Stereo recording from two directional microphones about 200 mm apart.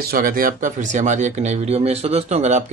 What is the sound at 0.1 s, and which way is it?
Speech, 45° right (ahead or behind).